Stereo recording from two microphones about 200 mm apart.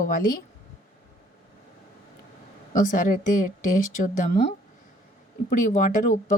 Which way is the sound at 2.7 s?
40° left (ahead or behind).